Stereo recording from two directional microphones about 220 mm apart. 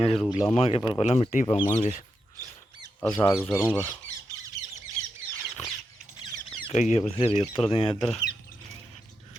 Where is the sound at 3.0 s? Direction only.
5° left (ahead or behind).